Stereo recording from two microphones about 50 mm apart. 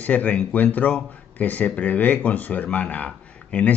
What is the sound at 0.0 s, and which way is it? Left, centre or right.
Speech, left.